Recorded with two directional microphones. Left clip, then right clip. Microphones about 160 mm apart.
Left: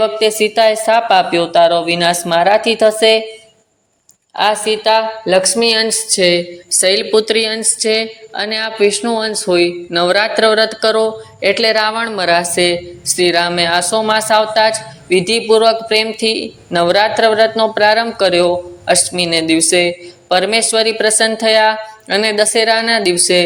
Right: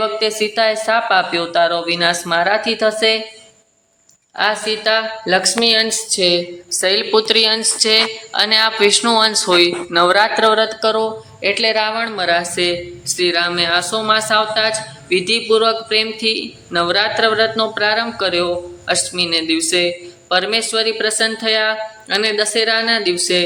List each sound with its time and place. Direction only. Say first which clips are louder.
0.0 s a woman's voice: left 5 dB; 15° left (ahead or behind)
4.4 s speech: left 4 dB; 15° left (ahead or behind); by 23.4 s 30° left (ahead or behind)